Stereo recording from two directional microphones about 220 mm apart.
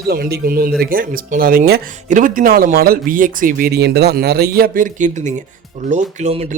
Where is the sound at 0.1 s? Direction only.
45° right (ahead or behind).